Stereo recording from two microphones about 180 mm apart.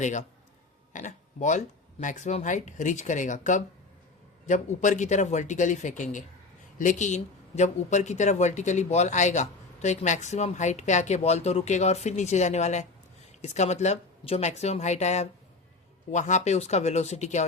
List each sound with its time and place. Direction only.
0.0 s speech: 40° left (ahead or behind)